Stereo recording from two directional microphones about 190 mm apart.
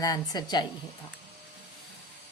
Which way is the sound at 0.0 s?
20° left (ahead or behind).